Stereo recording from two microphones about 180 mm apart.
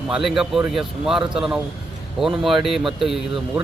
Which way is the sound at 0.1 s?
Centre (ahead or behind).